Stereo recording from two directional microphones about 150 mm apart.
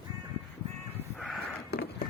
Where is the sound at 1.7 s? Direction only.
90° left.